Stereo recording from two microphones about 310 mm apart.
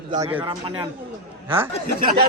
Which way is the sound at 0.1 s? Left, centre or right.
Centre.